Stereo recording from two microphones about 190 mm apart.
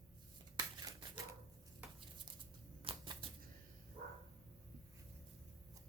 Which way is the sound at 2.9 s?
30° right (ahead or behind).